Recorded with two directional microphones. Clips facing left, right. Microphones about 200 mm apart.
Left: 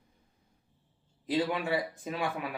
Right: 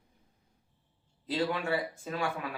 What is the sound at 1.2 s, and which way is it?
Speech, 15° left (ahead or behind).